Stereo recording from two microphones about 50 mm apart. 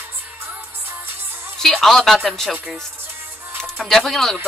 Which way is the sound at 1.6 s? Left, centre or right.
Centre.